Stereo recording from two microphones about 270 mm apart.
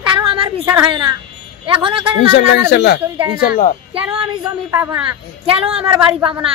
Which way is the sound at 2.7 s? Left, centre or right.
Left.